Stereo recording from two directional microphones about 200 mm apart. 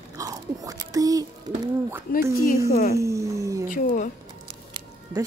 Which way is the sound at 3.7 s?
40° left (ahead or behind).